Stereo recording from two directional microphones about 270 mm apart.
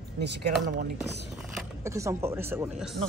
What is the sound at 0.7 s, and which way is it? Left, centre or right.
Speech, right.